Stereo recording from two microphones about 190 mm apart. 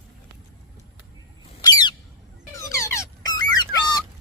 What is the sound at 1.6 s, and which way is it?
Bird, 20° left (ahead or behind).